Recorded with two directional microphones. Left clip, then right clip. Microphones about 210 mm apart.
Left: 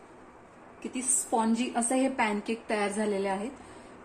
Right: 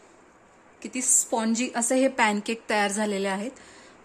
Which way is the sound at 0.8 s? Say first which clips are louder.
Right 7 dB; 55° right (ahead or behind).